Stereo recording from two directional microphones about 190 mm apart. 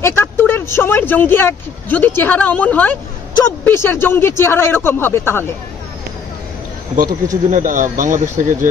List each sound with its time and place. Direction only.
0.0 s speech: 10° left (ahead or behind)
7.4 s speech: 40° right (ahead or behind)